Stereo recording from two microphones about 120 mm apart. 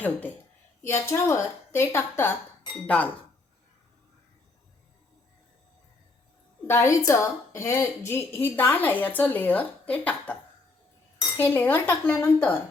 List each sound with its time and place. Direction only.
0.8 s a woman's voice: 20° left (ahead or behind)
6.7 s a woman's voice: 25° left (ahead or behind)
11.3 s a woman's voice: 15° left (ahead or behind)